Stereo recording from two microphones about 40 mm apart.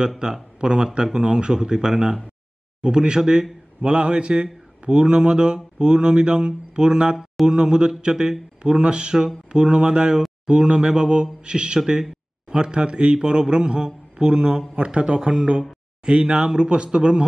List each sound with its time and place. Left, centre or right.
0.2 s speech: right